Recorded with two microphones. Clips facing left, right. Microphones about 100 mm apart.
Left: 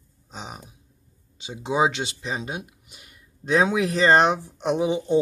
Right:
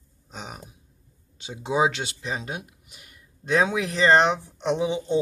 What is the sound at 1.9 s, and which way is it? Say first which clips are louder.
Speech: left 1 dB; centre (ahead or behind).